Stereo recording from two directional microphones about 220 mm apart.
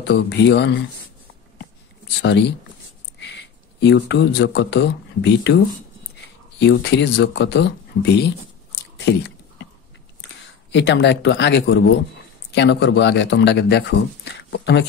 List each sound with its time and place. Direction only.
0.0 s speech: 50° left (ahead or behind)
3.8 s speech: 50° left (ahead or behind)
6.6 s speech: 50° left (ahead or behind)
10.7 s speech: 50° left (ahead or behind)